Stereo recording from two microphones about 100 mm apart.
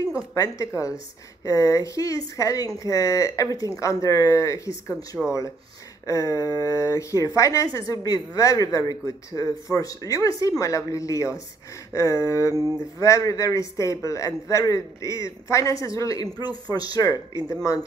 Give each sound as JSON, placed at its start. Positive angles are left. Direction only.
{"t": 0.3, "sound": "speech", "side_deg": 35}
{"t": 5.1, "sound": "speech", "side_deg": -5}
{"t": 6.0, "sound": "speech", "side_deg": 35}